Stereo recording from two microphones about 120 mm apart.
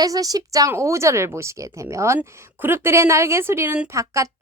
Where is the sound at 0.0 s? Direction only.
30° right (ahead or behind).